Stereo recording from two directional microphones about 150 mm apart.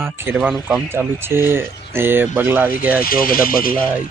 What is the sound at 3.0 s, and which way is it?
Speech, 75° left (ahead or behind).